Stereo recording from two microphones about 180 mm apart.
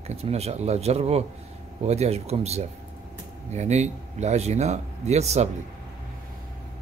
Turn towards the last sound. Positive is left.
turn(degrees=-35)  # may be behind; listen again after turning